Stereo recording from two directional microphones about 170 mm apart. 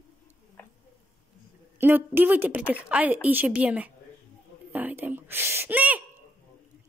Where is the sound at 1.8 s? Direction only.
10° right (ahead or behind).